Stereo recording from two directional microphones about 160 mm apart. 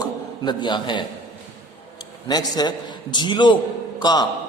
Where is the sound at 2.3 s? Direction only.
25° left (ahead or behind).